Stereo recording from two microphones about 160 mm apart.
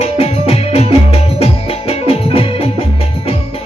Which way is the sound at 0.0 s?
40° left (ahead or behind).